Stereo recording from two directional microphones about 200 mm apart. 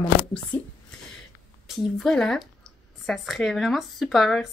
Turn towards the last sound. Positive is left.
turn(degrees=0)  # may be behind; listen again after turning